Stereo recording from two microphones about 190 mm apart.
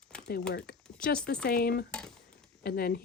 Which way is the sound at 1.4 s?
55° left (ahead or behind).